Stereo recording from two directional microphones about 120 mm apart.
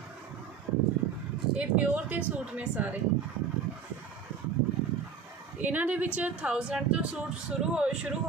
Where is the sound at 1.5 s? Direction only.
10° right (ahead or behind).